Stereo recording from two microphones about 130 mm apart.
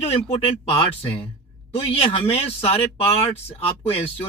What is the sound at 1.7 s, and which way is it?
Speech, 45° left (ahead or behind).